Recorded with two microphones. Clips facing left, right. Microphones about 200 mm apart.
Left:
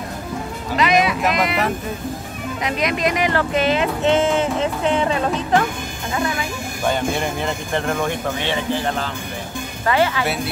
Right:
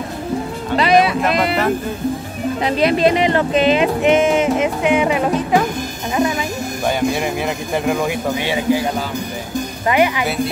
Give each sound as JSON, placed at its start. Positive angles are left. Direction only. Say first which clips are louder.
{"t": 0.7, "sound": "music", "louder": "right 4 dB", "side_deg": -35}
{"t": 1.3, "sound": "speech", "louder": "right 3 dB", "side_deg": -30}
{"t": 2.6, "sound": "speech", "louder": "right 6 dB", "side_deg": -30}
{"t": 6.9, "sound": "speech", "louder": "right 3 dB", "side_deg": -5}
{"t": 10.2, "sound": "speech", "louder": "right 3 dB", "side_deg": 0}